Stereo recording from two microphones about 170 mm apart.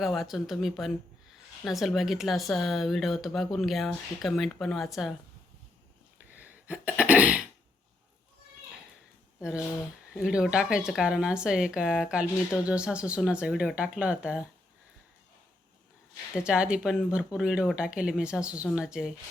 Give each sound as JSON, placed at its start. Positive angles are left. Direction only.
{"t": 0.0, "sound": "speech", "side_deg": 0}
{"t": 6.3, "sound": "sneeze", "side_deg": -10}
{"t": 9.4, "sound": "speech", "side_deg": -5}
{"t": 16.4, "sound": "speech", "side_deg": -5}